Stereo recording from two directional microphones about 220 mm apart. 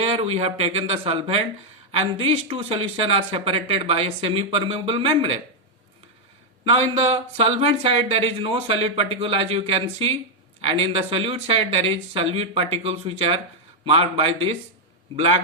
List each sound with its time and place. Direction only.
0.0 s speech: 30° right (ahead or behind)
6.9 s speech: 25° right (ahead or behind)